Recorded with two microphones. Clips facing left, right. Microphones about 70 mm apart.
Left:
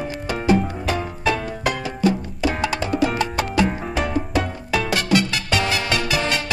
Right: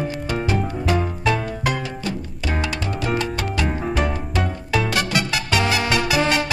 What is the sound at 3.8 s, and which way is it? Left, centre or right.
Music, centre.